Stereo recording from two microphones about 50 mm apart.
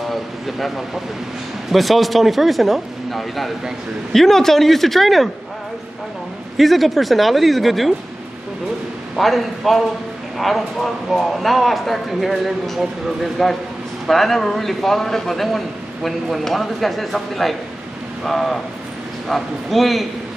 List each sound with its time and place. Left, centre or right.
0.1 s a man's voice: centre
6.5 s a man's voice: centre
9.1 s a man's voice: centre